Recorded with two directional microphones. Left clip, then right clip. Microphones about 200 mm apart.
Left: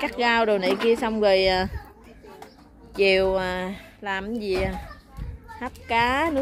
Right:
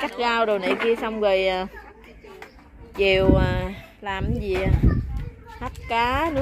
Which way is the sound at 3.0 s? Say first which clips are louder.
Right 1 dB; 10° left (ahead or behind).